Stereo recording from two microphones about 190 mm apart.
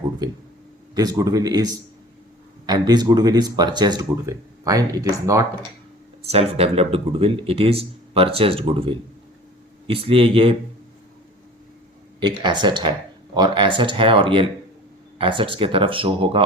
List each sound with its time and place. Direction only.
0.9 s speech: 20° right (ahead or behind)
6.2 s speech: 30° right (ahead or behind)
12.2 s speech: 25° right (ahead or behind)